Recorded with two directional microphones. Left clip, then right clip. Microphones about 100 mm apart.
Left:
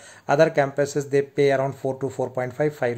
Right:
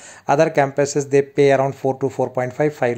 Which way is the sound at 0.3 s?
35° right (ahead or behind).